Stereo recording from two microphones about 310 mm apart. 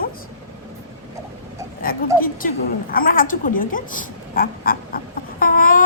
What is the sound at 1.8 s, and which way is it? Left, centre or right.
Speech, left.